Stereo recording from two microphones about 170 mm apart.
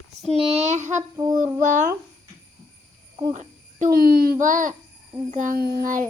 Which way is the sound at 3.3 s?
45° right (ahead or behind).